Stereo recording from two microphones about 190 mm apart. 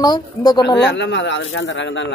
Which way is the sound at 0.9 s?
70° left (ahead or behind).